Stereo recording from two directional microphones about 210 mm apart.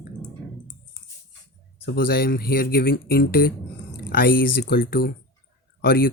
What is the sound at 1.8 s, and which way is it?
Speech, 45° left (ahead or behind).